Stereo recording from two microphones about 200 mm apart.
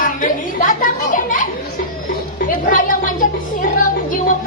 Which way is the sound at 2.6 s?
40° left (ahead or behind).